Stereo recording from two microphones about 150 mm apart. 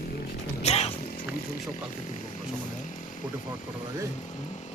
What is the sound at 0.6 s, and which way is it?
Music, 45° left (ahead or behind).